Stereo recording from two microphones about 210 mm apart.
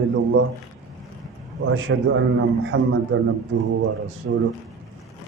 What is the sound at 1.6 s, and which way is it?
A man's voice, 70° right (ahead or behind).